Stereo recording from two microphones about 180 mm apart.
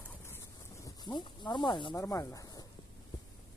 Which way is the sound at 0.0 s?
10° left (ahead or behind).